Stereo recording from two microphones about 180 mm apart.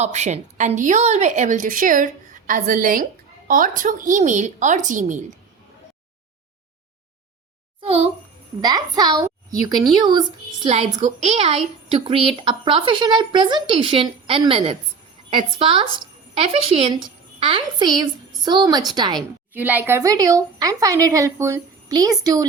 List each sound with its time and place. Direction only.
0.0 s a woman's voice: 40° right (ahead or behind)
7.8 s a sound: 35° right (ahead or behind)
8.6 s a woman's voice: 20° right (ahead or behind)
10.7 s a woman's voice: 35° right (ahead or behind)
19.5 s a woman's voice: 10° right (ahead or behind)